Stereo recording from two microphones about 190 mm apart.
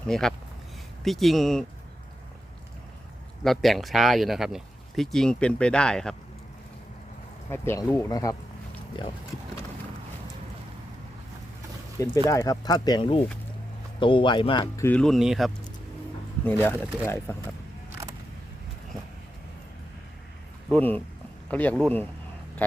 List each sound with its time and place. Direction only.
0.1 s speech: 5° left (ahead or behind)
3.4 s speech: centre (ahead or behind)
7.5 s speech: 15° left (ahead or behind)
11.9 s speech: 15° left (ahead or behind)
14.8 s speech: 10° left (ahead or behind)
16.5 s speech: 10° left (ahead or behind)
20.7 s speech: 10° left (ahead or behind)